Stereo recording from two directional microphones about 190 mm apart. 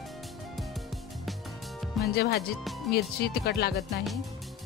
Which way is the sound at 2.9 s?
55° left (ahead or behind).